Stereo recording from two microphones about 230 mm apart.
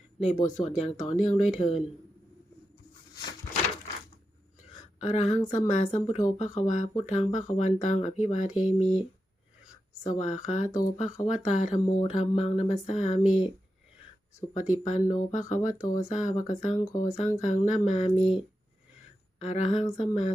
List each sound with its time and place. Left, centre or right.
0.3 s speech: left
4.9 s speech: left
10.1 s speech: left
14.5 s speech: left
19.4 s speech: left